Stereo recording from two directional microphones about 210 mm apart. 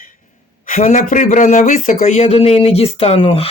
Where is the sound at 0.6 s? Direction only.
35° left (ahead or behind).